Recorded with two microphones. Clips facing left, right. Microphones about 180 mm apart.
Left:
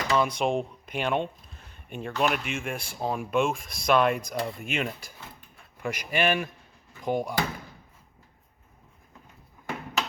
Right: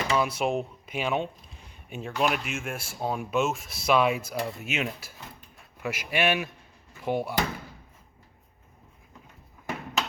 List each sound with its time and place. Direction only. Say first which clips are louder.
0.0 s speech: left 1 dB; 5° right (ahead or behind)